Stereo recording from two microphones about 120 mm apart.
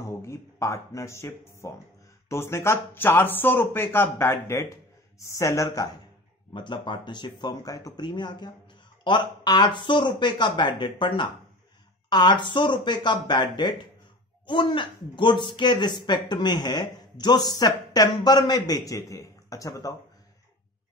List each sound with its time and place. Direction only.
0.0 s a man's voice: 25° left (ahead or behind)
6.5 s speech: 40° left (ahead or behind)